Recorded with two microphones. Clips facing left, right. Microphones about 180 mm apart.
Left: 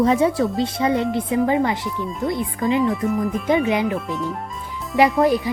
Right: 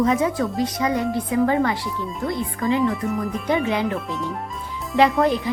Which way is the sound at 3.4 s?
15° left (ahead or behind).